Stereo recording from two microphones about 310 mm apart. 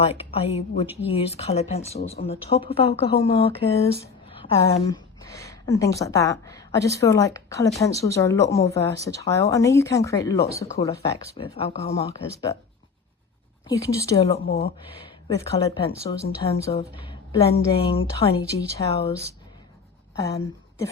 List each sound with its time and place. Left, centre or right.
0.0 s speech: centre
13.7 s a woman's voice: centre